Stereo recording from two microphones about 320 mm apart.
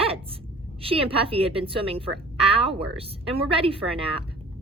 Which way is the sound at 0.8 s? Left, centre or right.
Centre.